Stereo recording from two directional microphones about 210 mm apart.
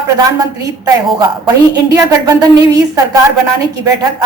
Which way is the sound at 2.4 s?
15° right (ahead or behind).